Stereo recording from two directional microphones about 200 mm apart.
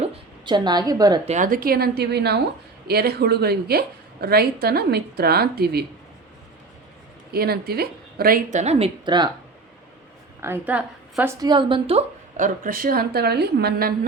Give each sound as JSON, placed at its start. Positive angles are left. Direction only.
{"t": 0.0, "sound": "a woman's voice", "side_deg": -20}
{"t": 1.2, "sound": "a woman's voice", "side_deg": -35}
{"t": 7.3, "sound": "a woman's voice", "side_deg": -50}
{"t": 10.4, "sound": "a woman's voice", "side_deg": -10}
{"t": 11.3, "sound": "a woman's voice", "side_deg": -20}
{"t": 12.6, "sound": "a woman's voice", "side_deg": -45}